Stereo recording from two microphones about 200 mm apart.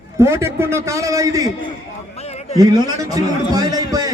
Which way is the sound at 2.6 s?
15° right (ahead or behind).